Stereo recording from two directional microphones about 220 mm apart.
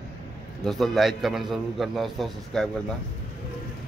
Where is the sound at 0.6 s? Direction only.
Centre (ahead or behind).